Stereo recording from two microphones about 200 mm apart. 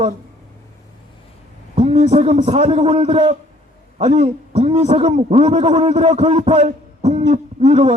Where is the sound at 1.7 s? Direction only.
30° right (ahead or behind).